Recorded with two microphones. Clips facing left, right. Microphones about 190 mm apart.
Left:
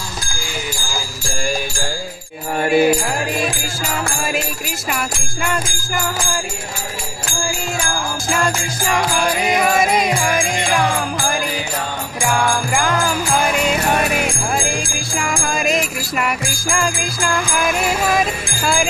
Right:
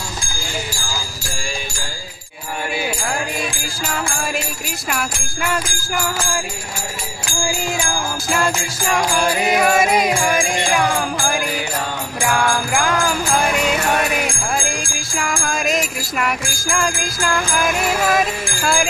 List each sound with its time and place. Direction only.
2.6 s music: 50° left (ahead or behind)
4.8 s music: centre (ahead or behind)
8.3 s music: centre (ahead or behind)
12.3 s jingle bell: centre (ahead or behind)
14.6 s music: centre (ahead or behind)